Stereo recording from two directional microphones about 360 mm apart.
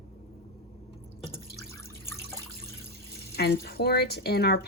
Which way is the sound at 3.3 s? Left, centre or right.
Left.